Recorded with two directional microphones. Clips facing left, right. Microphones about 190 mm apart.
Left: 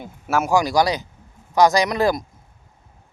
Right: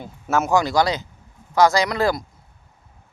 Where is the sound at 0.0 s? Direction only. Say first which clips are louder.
Even; 10° left (ahead or behind).